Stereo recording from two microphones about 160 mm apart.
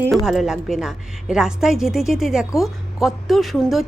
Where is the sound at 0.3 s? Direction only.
5° right (ahead or behind).